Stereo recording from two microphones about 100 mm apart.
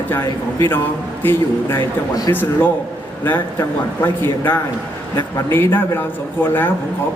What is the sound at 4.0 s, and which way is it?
Speech, 20° left (ahead or behind).